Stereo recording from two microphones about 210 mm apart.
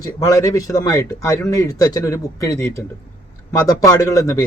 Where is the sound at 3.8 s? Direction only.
15° left (ahead or behind).